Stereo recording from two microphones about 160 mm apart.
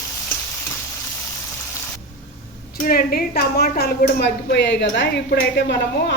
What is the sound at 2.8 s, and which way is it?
A woman's voice, 70° left (ahead or behind).